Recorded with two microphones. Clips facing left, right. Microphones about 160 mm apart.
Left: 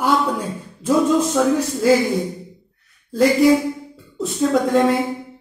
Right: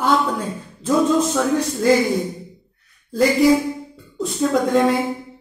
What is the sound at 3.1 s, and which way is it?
Speech, centre (ahead or behind).